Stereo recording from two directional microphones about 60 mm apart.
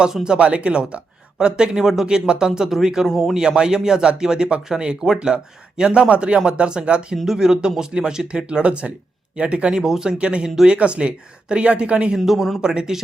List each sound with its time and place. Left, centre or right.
0.0 s speech: centre
3.1 s speech: centre
3.3 s speech: centre
12.2 s speech: centre
12.6 s speech: centre